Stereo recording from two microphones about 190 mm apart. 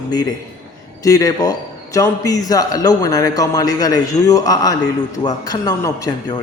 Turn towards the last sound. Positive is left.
turn(degrees=20)  # may be behind; listen again after turning